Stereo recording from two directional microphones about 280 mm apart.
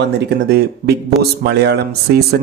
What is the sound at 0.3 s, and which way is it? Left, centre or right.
Speech, right.